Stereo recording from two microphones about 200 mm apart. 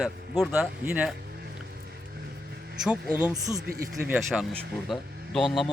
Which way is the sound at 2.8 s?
5° right (ahead or behind).